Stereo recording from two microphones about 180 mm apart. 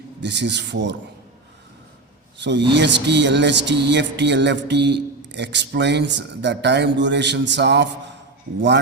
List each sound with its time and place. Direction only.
0.2 s speech: 75° right (ahead or behind)
2.4 s speech: 75° right (ahead or behind)